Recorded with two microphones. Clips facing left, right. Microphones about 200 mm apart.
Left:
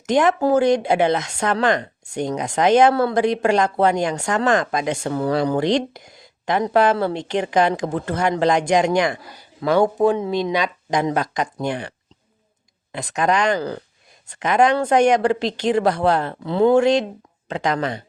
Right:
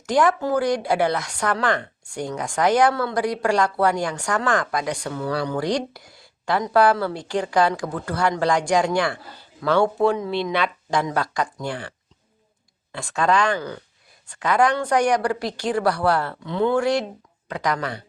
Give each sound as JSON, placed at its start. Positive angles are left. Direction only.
{"t": 0.0, "sound": "speech", "side_deg": 20}
{"t": 12.9, "sound": "speech", "side_deg": 20}
{"t": 13.6, "sound": "speech", "side_deg": 35}
{"t": 14.3, "sound": "speech", "side_deg": 20}
{"t": 16.4, "sound": "speech", "side_deg": 35}